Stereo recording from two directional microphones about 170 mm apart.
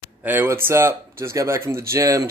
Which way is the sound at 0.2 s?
10° right (ahead or behind).